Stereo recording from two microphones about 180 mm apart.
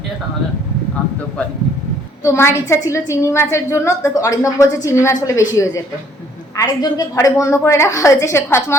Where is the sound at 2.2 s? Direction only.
15° left (ahead or behind).